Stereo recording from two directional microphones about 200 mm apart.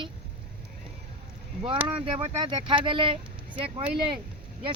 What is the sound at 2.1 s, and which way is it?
Speech, 25° right (ahead or behind).